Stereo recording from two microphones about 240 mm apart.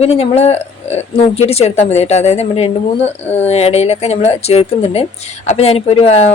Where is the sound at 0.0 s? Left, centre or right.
Left.